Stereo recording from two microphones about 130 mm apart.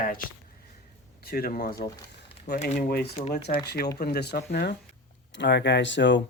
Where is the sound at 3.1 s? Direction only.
50° left (ahead or behind).